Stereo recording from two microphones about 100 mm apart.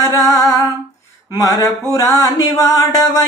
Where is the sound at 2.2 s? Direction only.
35° left (ahead or behind).